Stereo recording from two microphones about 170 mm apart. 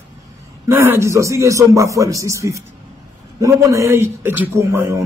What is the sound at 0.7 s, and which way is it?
A man's voice, 15° right (ahead or behind).